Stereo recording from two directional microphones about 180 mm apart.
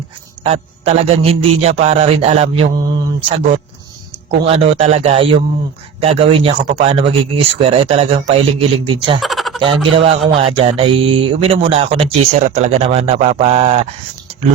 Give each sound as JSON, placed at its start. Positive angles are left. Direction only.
{"t": 0.4, "sound": "speech", "side_deg": -35}
{"t": 9.2, "sound": "a sound", "side_deg": 0}
{"t": 9.6, "sound": "speech", "side_deg": -30}